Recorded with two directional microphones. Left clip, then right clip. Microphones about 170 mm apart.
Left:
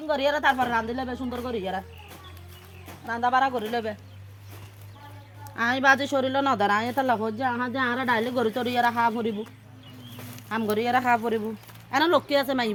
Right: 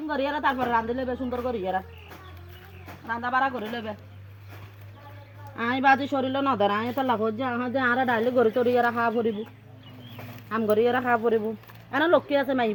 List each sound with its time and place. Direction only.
0.1 s speech: 25° left (ahead or behind)
3.1 s speech: 20° left (ahead or behind)
5.5 s speech: 25° left (ahead or behind); by 8.2 s centre (ahead or behind)
8.2 s speech: 25° left (ahead or behind)
10.5 s speech: 45° left (ahead or behind)